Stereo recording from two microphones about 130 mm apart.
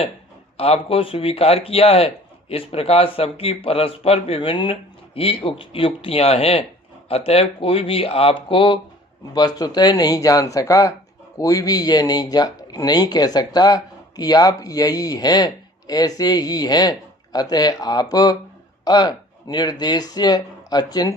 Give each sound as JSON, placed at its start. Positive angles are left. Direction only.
{"t": 0.5, "sound": "speech", "side_deg": 50}